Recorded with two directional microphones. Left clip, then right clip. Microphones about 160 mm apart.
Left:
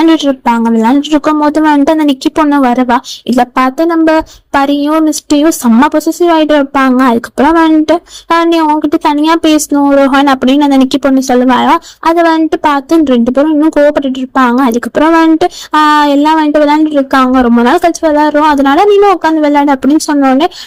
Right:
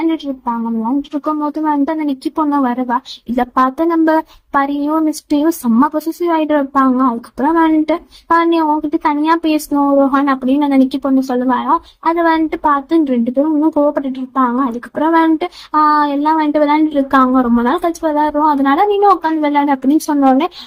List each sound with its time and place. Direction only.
0.0 s a woman's voice: 50° left (ahead or behind)
19.8 s a woman's voice: 25° left (ahead or behind)